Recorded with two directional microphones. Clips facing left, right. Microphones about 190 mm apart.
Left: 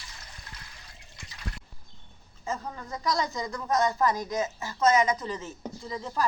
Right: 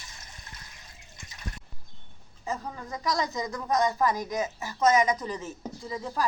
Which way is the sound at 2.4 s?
15° right (ahead or behind).